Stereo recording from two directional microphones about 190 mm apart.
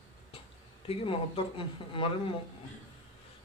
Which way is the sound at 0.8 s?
30° left (ahead or behind).